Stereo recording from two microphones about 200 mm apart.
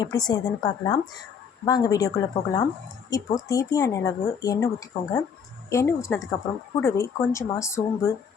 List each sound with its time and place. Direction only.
0.0 s a woman's voice: 20° left (ahead or behind)